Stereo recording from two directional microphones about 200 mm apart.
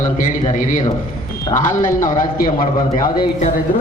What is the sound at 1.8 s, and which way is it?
A man's voice, 40° left (ahead or behind).